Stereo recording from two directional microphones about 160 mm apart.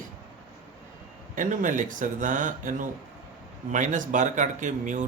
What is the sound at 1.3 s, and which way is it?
Speech, 55° right (ahead or behind).